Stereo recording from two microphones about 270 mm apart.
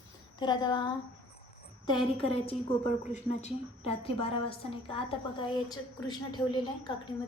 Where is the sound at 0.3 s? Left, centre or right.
Centre.